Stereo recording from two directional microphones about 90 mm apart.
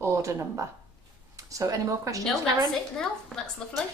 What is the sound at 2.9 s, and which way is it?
Speech, 5° left (ahead or behind).